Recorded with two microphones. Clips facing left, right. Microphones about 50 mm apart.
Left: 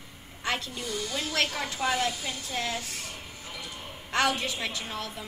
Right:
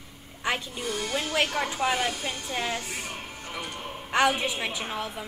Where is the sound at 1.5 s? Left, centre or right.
Right.